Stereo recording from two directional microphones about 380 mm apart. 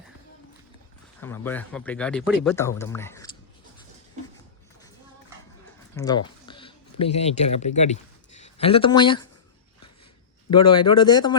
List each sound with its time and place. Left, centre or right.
1.2 s speech: centre
6.0 s speech: centre
10.7 s speech: centre